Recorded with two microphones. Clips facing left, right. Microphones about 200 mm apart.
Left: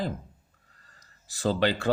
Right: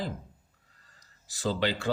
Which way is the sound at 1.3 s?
55° left (ahead or behind).